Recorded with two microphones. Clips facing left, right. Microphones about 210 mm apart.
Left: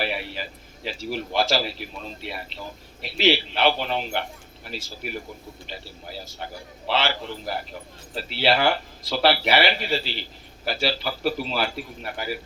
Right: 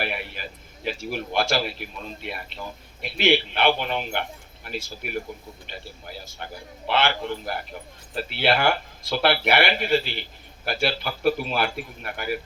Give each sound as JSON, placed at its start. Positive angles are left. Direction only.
{"t": 0.0, "sound": "speech", "side_deg": -55}
{"t": 6.2, "sound": "speech", "side_deg": -55}